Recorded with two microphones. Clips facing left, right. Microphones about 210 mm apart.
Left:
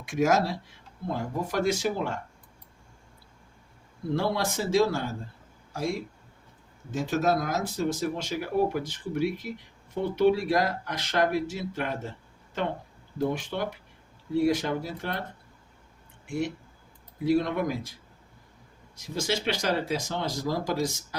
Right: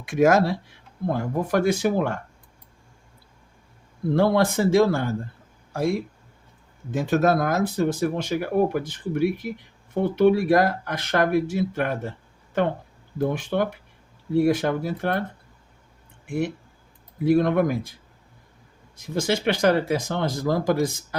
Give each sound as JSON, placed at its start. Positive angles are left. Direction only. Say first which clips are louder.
{"t": 0.0, "sound": "speech", "louder": "right 6 dB", "side_deg": -60}
{"t": 4.1, "sound": "speech", "louder": "right 8 dB", "side_deg": -55}
{"t": 13.1, "sound": "speech", "louder": "right 5 dB", "side_deg": -55}
{"t": 16.2, "sound": "speech", "louder": "right 4 dB", "side_deg": -55}
{"t": 18.9, "sound": "speech", "louder": "right 5 dB", "side_deg": -55}